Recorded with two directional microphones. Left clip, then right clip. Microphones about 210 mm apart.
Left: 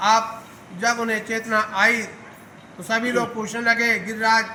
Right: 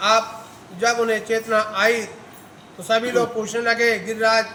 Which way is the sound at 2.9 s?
15° right (ahead or behind).